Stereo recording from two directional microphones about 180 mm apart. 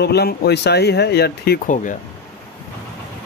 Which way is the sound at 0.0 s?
65° left (ahead or behind).